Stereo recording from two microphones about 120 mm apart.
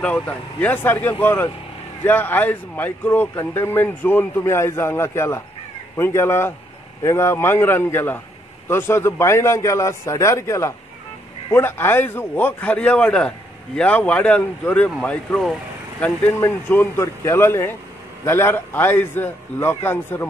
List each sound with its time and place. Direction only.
0.0 s a man's voice: 10° left (ahead or behind)
16.0 s a man's voice: 20° left (ahead or behind)